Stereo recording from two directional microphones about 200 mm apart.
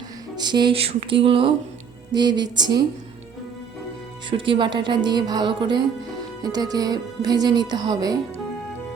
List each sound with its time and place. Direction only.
0.3 s speech: 20° right (ahead or behind)
4.3 s speech: 25° right (ahead or behind)